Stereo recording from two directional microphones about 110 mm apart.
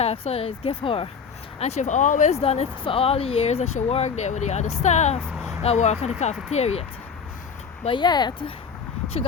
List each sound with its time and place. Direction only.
0.0 s speech: 75° left (ahead or behind); by 1.0 s 55° left (ahead or behind)
1.5 s speech: 80° left
7.9 s speech: 45° left (ahead or behind)